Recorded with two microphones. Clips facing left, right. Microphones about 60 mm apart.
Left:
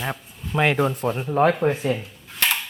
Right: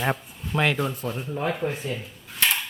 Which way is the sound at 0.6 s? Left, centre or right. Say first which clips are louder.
Left 5 dB; left.